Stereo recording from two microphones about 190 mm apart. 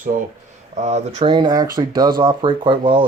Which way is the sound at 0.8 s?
35° right (ahead or behind).